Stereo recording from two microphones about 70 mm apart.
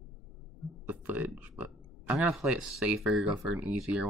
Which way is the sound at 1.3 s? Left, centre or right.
Centre.